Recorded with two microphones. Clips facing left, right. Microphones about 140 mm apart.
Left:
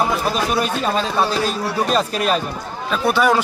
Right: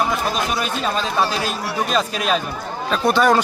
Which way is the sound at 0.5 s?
Centre (ahead or behind).